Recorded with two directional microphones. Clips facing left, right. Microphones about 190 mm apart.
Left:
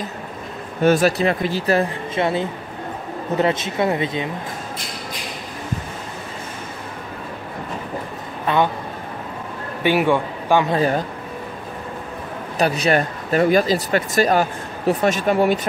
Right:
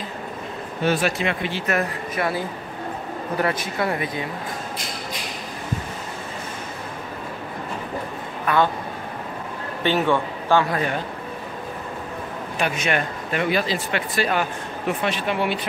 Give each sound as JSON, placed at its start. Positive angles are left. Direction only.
{"t": 0.8, "sound": "speech", "side_deg": 40}
{"t": 8.5, "sound": "speech", "side_deg": 25}
{"t": 9.8, "sound": "a man's voice", "side_deg": 10}
{"t": 12.5, "sound": "speech", "side_deg": 35}